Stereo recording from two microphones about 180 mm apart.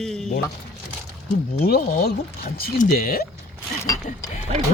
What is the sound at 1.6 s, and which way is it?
Speech, 60° left (ahead or behind).